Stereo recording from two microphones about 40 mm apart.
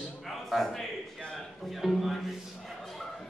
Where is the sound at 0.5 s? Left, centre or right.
Centre.